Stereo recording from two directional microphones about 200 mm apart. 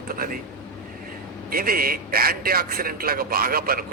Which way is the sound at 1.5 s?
45° right (ahead or behind).